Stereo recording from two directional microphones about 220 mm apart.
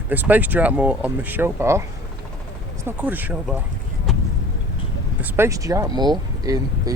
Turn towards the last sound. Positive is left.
turn(degrees=-20)  # may be behind; listen again after turning